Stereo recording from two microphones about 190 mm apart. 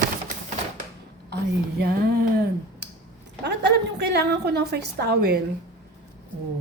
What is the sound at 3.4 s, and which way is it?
A woman's voice, 60° right (ahead or behind).